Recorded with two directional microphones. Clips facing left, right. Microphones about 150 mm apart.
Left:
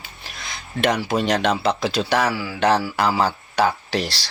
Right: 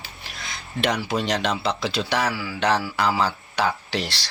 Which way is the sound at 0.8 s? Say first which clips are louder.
Left 4 dB; 50° left (ahead or behind).